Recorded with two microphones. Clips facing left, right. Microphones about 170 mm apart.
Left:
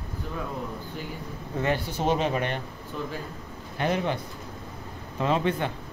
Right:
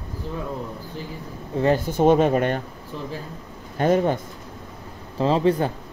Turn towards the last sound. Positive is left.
turn(degrees=-35)  # may be behind; listen again after turning